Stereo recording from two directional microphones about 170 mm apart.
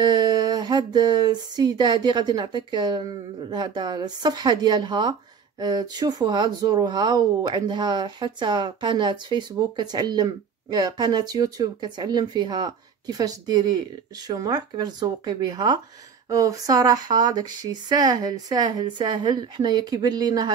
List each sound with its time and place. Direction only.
0.0 s speech: 25° right (ahead or behind)